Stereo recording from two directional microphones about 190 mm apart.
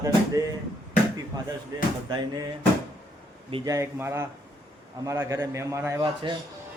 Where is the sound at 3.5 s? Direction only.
20° right (ahead or behind).